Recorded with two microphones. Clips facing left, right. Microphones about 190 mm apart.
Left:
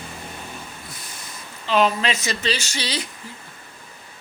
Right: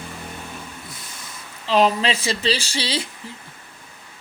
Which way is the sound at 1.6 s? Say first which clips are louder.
Right 2 dB; 35° right (ahead or behind).